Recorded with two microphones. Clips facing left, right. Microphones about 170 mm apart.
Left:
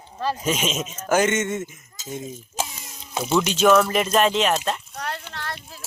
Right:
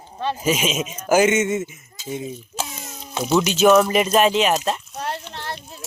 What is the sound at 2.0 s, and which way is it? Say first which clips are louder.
Speech: right 4 dB; 45° left (ahead or behind).